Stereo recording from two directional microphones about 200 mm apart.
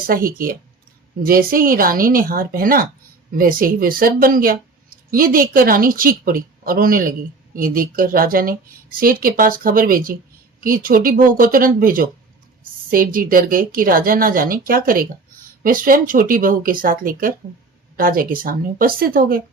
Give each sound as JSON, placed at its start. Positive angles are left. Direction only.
{"t": 0.1, "sound": "a woman's voice", "side_deg": -45}